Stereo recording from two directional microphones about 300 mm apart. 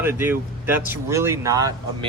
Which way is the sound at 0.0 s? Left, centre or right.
Centre.